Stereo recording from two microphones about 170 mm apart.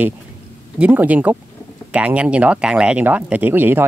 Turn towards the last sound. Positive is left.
turn(degrees=-10)  # may be behind; listen again after turning